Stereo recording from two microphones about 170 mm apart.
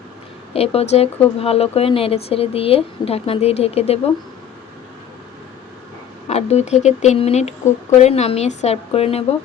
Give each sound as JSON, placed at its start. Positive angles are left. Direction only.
{"t": 0.5, "sound": "speech", "side_deg": 35}
{"t": 6.2, "sound": "speech", "side_deg": 40}